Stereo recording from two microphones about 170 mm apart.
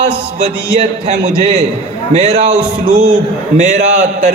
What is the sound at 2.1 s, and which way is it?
Speech, 40° right (ahead or behind).